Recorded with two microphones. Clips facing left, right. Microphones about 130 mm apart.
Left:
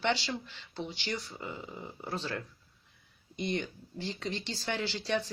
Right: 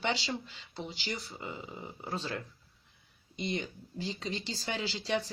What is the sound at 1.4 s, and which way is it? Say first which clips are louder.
Speech: left 1 dB; 5° right (ahead or behind).